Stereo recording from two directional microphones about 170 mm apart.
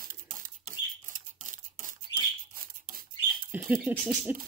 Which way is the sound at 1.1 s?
50° right (ahead or behind).